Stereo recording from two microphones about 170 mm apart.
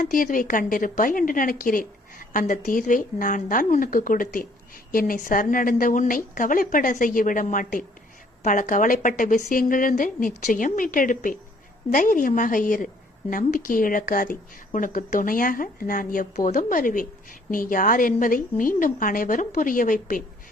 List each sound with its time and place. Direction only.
0.0 s a woman's voice: 55° left (ahead or behind)